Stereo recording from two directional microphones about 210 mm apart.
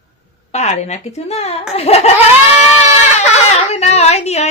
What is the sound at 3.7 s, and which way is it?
Speech, 30° left (ahead or behind).